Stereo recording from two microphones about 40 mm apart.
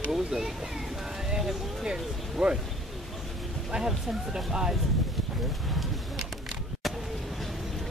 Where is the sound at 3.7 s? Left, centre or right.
Centre.